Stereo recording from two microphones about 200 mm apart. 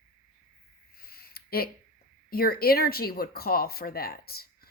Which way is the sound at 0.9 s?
50° left (ahead or behind).